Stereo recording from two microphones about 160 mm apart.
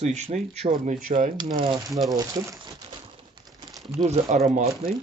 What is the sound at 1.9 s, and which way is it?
Speech, centre (ahead or behind).